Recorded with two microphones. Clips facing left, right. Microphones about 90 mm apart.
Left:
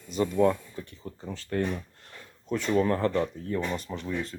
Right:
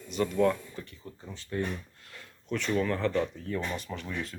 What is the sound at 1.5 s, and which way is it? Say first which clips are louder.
Speech: left 4 dB; 55° left (ahead or behind).